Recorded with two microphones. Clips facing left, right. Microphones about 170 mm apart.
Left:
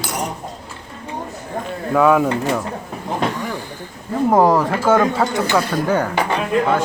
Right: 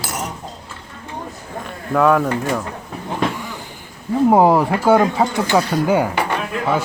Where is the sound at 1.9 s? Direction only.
5° left (ahead or behind).